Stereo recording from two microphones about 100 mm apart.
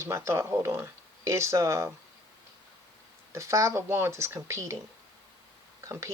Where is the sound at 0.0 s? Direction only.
30° right (ahead or behind).